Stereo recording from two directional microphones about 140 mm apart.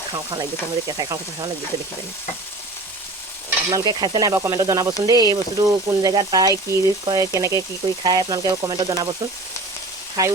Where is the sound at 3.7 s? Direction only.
30° right (ahead or behind).